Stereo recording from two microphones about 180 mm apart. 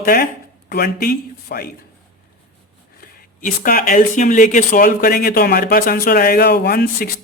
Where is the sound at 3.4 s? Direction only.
50° left (ahead or behind).